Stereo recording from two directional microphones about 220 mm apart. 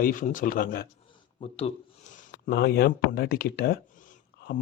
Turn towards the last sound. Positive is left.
turn(degrees=40)  # may be behind; listen again after turning